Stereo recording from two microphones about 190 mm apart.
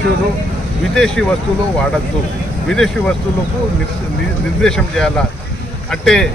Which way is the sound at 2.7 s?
5° left (ahead or behind).